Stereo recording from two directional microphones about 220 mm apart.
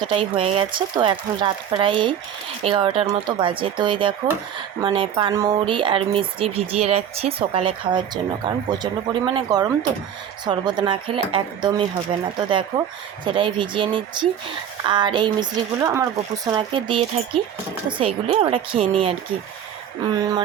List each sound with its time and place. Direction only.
0.0 s speech: 25° right (ahead or behind)
20.1 s speech: 15° right (ahead or behind)